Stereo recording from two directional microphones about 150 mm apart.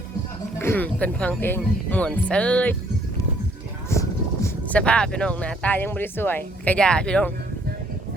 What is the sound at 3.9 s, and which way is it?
Vehicle, 20° left (ahead or behind).